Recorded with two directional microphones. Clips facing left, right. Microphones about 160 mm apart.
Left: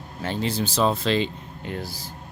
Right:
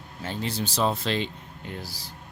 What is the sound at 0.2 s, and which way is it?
Speech, 80° left.